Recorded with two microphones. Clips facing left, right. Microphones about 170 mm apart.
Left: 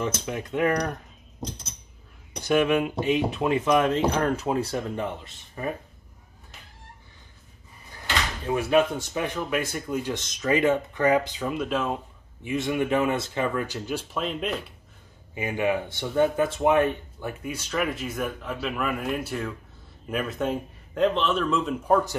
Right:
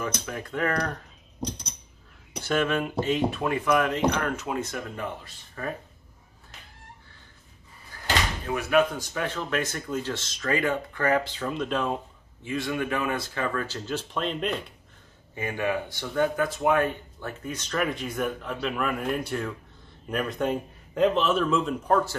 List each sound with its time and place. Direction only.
0.2 s speech: 20° left (ahead or behind)
1.4 s a sound: centre (ahead or behind)
2.4 s speech: 15° left (ahead or behind)
7.9 s door: 20° left (ahead or behind)
8.5 s speech: 30° left (ahead or behind); by 12.0 s 5° left (ahead or behind)
12.4 s speech: 20° left (ahead or behind); by 14.6 s 5° left (ahead or behind)
15.3 s a man's voice: 15° left (ahead or behind)